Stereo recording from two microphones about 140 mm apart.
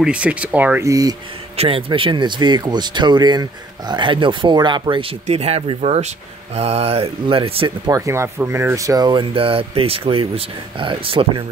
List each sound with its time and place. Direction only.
0.0 s speech: 10° right (ahead or behind)
0.8 s speech: 25° right (ahead or behind)
1.6 s speech: 40° right (ahead or behind)
5.2 s speech: 50° right (ahead or behind)